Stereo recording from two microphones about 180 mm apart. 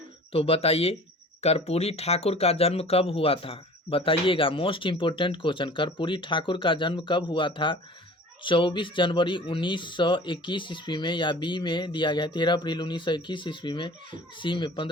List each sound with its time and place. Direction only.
0.3 s speech: 30° left (ahead or behind)